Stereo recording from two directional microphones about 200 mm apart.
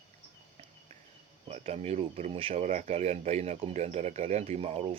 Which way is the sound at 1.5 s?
35° right (ahead or behind).